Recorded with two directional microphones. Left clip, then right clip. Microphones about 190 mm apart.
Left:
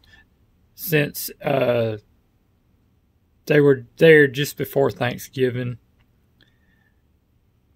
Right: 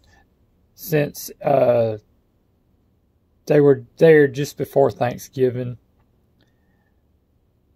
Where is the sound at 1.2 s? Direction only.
15° left (ahead or behind).